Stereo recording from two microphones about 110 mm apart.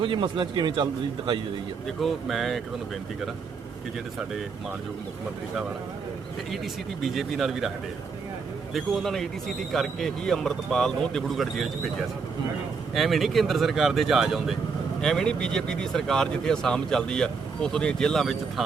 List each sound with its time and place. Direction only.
0.0 s a man's voice: 50° right (ahead or behind)
2.0 s speech: centre (ahead or behind)
7.0 s speech: centre (ahead or behind)
8.7 s speech: centre (ahead or behind)
12.9 s speech: centre (ahead or behind)